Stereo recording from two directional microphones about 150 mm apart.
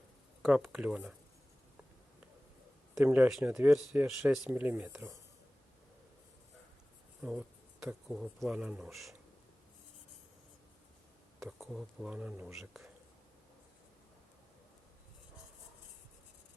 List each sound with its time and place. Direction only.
0.4 s speech: 5° right (ahead or behind)
2.9 s speech: 10° right (ahead or behind)
7.2 s speech: 5° right (ahead or behind)
11.3 s speech: centre (ahead or behind)